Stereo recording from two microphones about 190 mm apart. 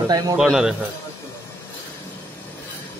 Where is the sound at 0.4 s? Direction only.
5° right (ahead or behind).